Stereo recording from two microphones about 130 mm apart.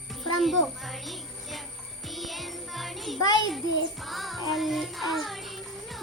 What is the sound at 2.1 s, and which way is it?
Music, centre (ahead or behind).